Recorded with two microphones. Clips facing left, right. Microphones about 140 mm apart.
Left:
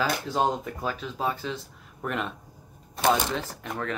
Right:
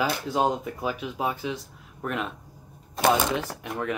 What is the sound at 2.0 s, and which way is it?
Speech, centre (ahead or behind).